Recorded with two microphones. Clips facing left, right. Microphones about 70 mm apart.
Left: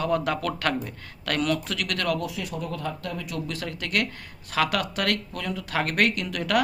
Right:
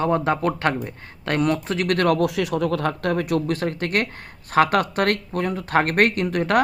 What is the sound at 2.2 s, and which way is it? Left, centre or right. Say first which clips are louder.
A man's voice: right 10 dB; right.